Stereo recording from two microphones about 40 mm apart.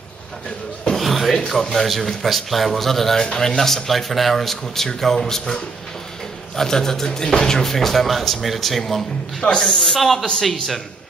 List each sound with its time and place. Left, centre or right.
0.9 s music: centre
1.6 s speech: centre
9.4 s speech: centre
9.8 s speech: centre